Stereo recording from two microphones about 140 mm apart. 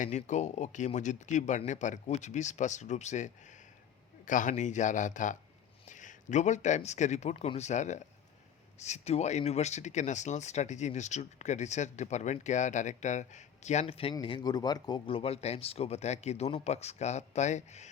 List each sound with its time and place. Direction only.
0.0 s speech: 55° left (ahead or behind)
4.3 s speech: 65° left (ahead or behind)
13.8 s speech: 40° left (ahead or behind)